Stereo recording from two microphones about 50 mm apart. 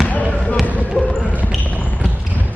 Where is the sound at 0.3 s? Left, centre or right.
Left.